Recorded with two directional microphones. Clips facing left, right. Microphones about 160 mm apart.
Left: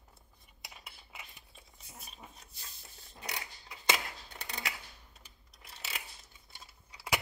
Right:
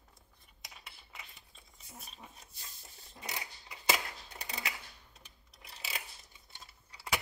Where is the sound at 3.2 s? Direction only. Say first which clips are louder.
Even; 5° right (ahead or behind).